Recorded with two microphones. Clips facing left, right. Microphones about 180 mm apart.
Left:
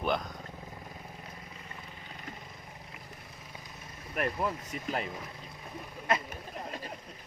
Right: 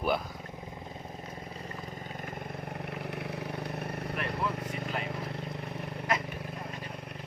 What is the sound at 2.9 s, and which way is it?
Vehicle, 70° right (ahead or behind).